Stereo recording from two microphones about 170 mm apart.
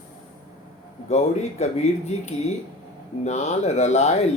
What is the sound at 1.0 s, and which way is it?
Speech, 40° left (ahead or behind).